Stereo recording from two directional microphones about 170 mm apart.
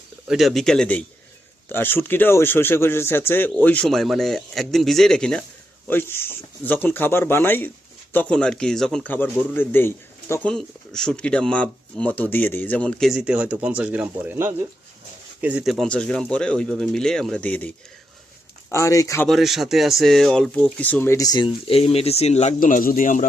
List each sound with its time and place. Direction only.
0.3 s speech: centre (ahead or behind)
10.5 s speech: 5° left (ahead or behind)
18.7 s speech: 20° left (ahead or behind)
19.3 s speech: centre (ahead or behind); by 23.2 s 55° left (ahead or behind)